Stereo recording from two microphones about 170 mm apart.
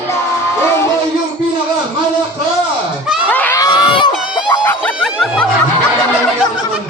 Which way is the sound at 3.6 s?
25° left (ahead or behind).